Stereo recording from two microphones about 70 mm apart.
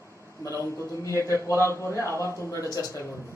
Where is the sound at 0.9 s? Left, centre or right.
Left.